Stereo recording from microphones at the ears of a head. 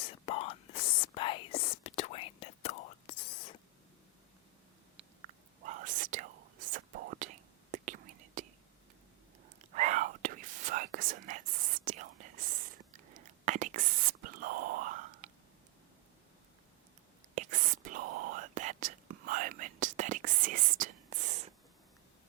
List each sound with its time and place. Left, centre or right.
0.0 s whispering: left
4.9 s whispering: right
9.6 s whispering: right
17.3 s whispering: right